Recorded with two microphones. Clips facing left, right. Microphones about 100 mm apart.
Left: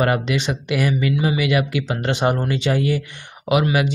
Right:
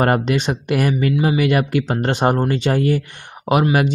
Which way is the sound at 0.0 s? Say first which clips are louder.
Right 3 dB; 45° right (ahead or behind).